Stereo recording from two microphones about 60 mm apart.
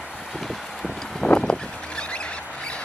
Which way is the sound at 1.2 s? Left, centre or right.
Centre.